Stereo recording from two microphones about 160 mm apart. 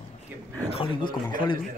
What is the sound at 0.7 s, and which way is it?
Speech, 30° left (ahead or behind).